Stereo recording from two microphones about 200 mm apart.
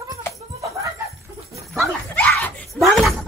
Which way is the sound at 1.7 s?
Centre (ahead or behind).